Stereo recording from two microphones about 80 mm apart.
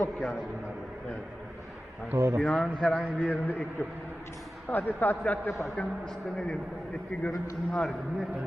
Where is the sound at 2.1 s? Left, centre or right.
Right.